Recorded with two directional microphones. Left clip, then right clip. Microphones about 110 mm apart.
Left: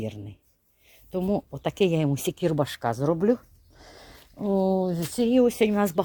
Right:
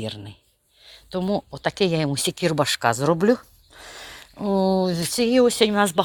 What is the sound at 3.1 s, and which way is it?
Speech, 15° right (ahead or behind).